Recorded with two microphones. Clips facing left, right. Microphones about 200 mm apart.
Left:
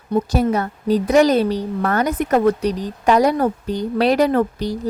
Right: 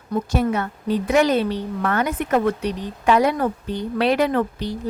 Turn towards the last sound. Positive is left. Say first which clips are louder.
# left 4 dB
turn(degrees=40)  # may be behind; listen again after turning